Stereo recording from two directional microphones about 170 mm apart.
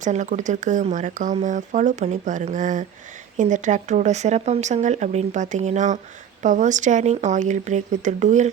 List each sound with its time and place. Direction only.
0.0 s speech: 45° right (ahead or behind)